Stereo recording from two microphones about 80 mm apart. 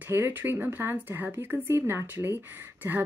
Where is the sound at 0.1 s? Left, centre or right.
Right.